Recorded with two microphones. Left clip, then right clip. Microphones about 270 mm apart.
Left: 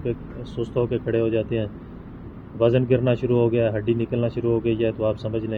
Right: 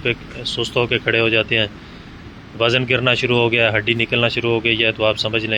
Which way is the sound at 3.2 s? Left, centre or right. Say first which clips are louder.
Right 4 dB; right.